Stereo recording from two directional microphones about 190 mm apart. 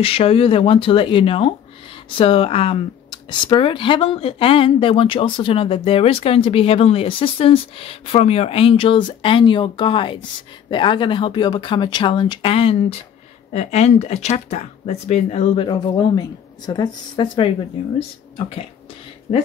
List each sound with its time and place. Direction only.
0.0 s speech: 30° left (ahead or behind)